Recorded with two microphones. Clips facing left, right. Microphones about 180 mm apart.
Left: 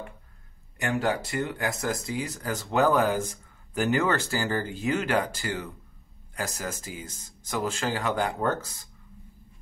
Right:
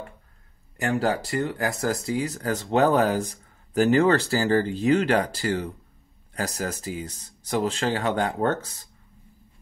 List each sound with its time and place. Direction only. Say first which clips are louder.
0.7 s speech: right 3 dB; 35° right (ahead or behind)